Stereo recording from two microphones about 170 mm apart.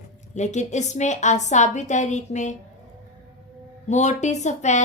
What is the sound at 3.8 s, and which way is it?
Speech, 45° left (ahead or behind).